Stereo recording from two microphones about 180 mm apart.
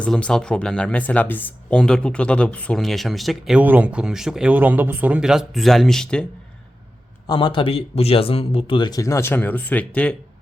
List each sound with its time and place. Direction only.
0.0 s speech: 5° left (ahead or behind)
7.3 s speech: 25° left (ahead or behind); by 10.2 s 10° left (ahead or behind)